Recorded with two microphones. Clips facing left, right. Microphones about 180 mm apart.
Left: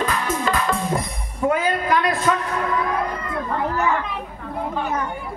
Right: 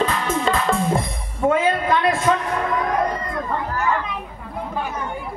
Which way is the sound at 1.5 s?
25° right (ahead or behind).